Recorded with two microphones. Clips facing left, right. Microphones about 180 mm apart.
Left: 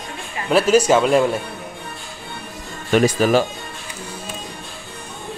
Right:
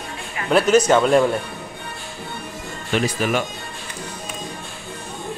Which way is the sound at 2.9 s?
45° left (ahead or behind).